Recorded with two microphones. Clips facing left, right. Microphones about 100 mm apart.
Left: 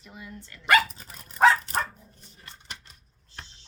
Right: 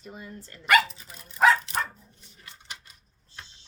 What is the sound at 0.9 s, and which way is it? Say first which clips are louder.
Dog: even; 45° left (ahead or behind).